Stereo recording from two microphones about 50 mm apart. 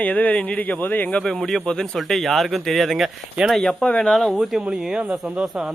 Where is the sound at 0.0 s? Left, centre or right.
Left.